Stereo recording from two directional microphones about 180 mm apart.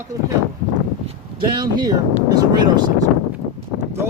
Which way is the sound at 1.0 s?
25° right (ahead or behind).